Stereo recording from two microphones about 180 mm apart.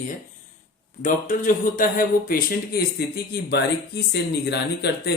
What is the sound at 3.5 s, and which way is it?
Speech, 65° left (ahead or behind).